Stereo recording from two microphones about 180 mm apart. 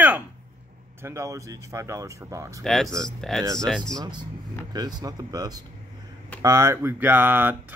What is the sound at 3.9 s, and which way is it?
Speech, 25° right (ahead or behind).